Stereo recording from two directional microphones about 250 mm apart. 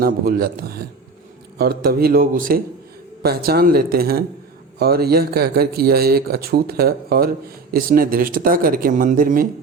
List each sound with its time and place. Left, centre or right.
0.0 s a man's voice: right